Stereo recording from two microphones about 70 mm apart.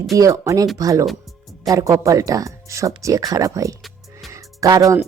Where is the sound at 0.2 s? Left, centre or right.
Right.